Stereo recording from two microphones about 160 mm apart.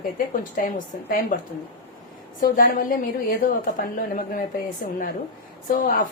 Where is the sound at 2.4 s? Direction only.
60° left (ahead or behind).